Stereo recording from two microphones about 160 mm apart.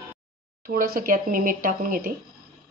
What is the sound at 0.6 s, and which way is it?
Speech, 60° right (ahead or behind).